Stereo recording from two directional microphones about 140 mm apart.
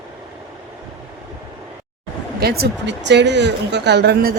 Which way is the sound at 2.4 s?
90° right.